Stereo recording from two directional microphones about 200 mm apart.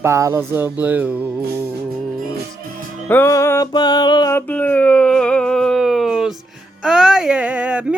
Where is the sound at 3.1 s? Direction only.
15° left (ahead or behind).